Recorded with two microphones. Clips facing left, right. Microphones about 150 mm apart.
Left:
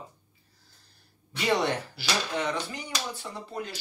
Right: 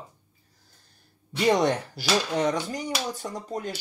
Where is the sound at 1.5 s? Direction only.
45° right (ahead or behind).